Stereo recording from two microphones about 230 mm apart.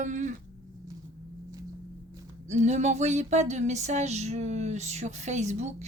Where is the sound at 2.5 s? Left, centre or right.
Right.